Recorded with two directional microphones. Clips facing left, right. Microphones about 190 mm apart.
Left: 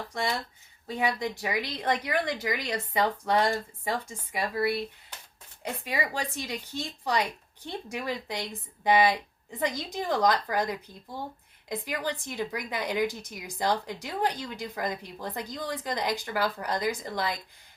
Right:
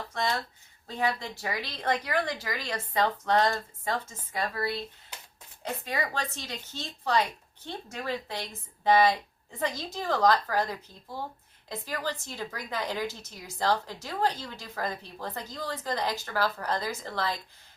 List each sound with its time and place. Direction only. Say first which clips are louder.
0.1 s speech: right 1 dB; 15° left (ahead or behind)
5.8 s speech: left 1 dB; 10° left (ahead or behind)